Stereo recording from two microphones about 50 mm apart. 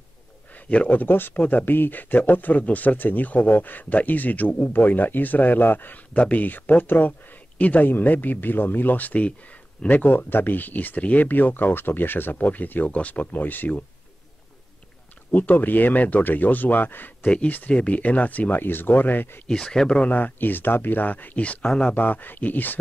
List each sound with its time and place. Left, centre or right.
0.7 s speech: left
1.0 s speech: left
1.3 s speech: left
6.1 s speech: left
15.3 s speech: left
17.6 s speech: left
19.4 s speech: centre
20.0 s speech: left